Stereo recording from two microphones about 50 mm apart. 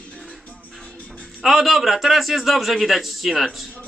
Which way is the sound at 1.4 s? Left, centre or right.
Centre.